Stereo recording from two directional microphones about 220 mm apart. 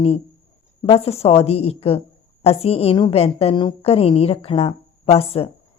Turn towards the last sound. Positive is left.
turn(degrees=25)  # may be behind; listen again after turning